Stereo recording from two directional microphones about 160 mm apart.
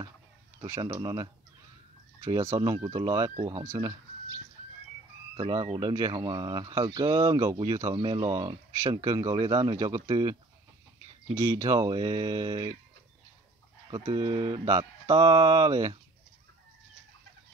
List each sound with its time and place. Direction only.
0.6 s speech: 20° right (ahead or behind)
11.3 s speech: 20° right (ahead or behind)
13.8 s speech: 30° right (ahead or behind)